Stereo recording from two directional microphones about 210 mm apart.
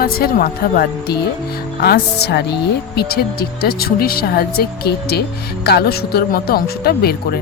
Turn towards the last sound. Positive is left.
turn(degrees=45)  # may be behind; listen again after turning